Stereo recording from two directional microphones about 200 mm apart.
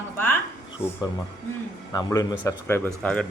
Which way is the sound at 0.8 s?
10° left (ahead or behind).